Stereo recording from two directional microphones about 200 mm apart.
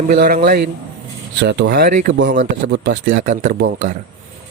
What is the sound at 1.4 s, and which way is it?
Speech, 60° right (ahead or behind).